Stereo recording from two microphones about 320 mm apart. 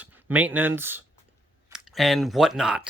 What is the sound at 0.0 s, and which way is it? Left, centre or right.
Speech, centre.